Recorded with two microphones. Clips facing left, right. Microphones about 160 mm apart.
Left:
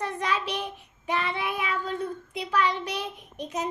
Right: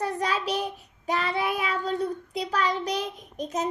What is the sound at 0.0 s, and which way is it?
Child singing, 35° right (ahead or behind).